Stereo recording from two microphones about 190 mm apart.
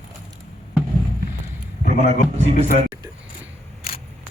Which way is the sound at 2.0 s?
35° right (ahead or behind).